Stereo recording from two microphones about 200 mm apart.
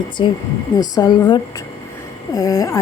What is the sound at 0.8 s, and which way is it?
A woman's voice, 20° left (ahead or behind).